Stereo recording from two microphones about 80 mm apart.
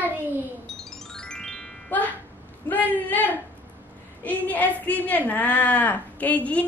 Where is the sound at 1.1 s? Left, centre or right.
Centre.